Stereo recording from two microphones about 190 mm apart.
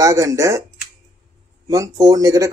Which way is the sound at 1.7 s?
20° right (ahead or behind).